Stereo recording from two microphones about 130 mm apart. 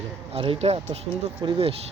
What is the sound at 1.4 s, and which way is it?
Speech, 40° right (ahead or behind).